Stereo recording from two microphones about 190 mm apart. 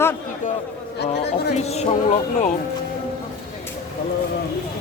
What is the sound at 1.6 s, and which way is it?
Speech, 35° left (ahead or behind).